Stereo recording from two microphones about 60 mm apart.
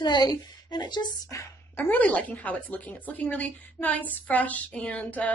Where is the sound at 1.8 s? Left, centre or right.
Left.